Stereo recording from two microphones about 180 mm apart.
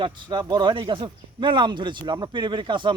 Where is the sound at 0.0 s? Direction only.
25° right (ahead or behind).